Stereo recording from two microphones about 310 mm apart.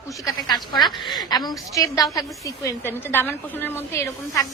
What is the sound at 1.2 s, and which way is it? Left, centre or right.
A woman's voice, centre.